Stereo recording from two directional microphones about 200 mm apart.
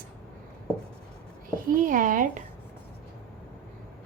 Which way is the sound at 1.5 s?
45° right (ahead or behind).